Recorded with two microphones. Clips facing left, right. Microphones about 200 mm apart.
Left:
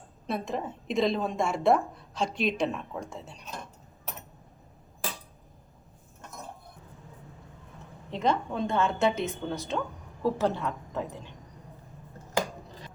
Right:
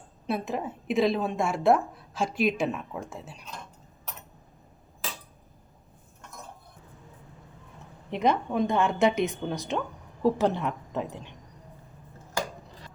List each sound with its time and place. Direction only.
0.3 s a woman's voice: 5° right (ahead or behind)
8.1 s a woman's voice: 15° right (ahead or behind)